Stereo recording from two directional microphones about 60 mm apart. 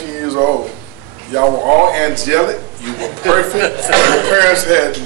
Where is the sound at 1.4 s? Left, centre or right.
Right.